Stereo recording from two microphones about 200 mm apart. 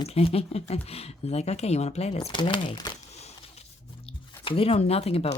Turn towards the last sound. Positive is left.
turn(degrees=30)  # may be behind; listen again after turning